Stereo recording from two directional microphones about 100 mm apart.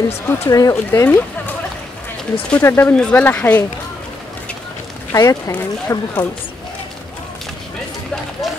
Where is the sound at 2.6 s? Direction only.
20° left (ahead or behind).